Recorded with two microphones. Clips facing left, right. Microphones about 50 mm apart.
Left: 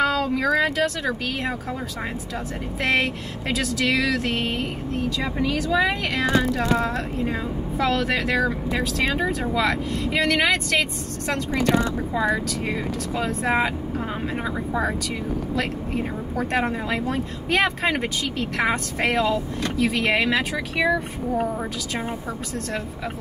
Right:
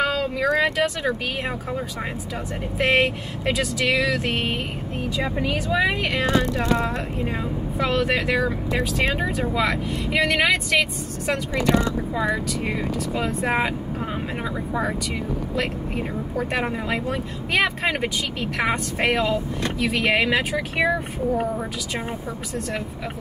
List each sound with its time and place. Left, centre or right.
0.0 s speech: centre
2.8 s speech: centre
6.2 s speech: centre
7.8 s speech: centre
12.6 s speech: centre
16.3 s speech: centre
20.7 s speech: right